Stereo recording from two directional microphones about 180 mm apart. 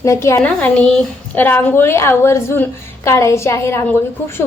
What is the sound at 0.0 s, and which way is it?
A woman's voice, 15° left (ahead or behind).